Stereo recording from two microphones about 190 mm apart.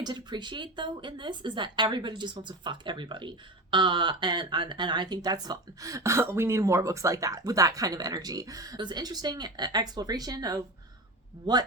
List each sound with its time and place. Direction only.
0.0 s a woman's voice: 20° right (ahead or behind)